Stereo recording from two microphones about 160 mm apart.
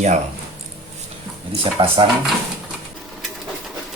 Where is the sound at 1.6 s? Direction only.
35° right (ahead or behind).